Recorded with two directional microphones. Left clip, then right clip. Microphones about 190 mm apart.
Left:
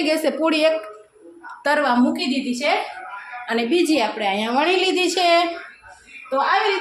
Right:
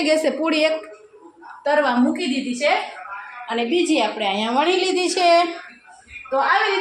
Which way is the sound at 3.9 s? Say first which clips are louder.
Even; 5° left (ahead or behind).